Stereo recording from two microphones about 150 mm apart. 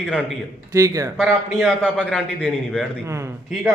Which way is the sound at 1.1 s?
5° left (ahead or behind).